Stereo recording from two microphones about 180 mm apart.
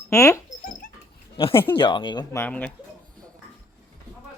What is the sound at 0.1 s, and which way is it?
Dog, 15° left (ahead or behind).